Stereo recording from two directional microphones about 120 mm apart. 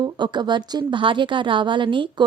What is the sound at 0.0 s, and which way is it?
A woman's voice, 40° right (ahead or behind).